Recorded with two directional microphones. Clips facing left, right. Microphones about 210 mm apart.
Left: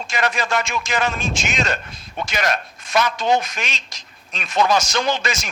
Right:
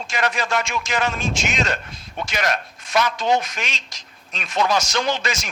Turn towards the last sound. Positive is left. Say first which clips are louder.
# left 1 dB
turn(degrees=50)  # may be behind; listen again after turning